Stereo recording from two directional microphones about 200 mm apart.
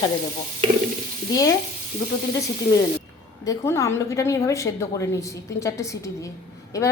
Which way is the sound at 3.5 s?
15° left (ahead or behind).